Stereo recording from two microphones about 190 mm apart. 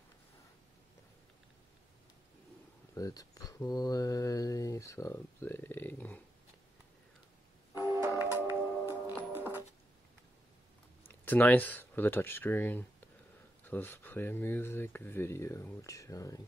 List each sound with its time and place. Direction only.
2.9 s speech: 20° left (ahead or behind)
7.9 s music: 15° right (ahead or behind)
11.2 s speech: 10° left (ahead or behind)